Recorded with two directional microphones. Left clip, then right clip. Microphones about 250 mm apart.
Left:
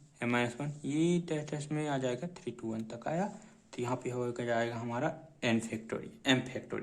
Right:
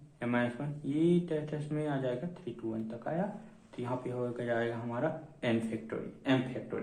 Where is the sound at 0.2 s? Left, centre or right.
Left.